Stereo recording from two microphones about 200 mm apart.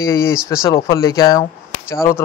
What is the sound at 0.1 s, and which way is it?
A man's voice, 15° left (ahead or behind).